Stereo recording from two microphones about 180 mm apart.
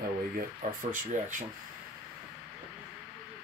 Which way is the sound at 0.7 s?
50° right (ahead or behind).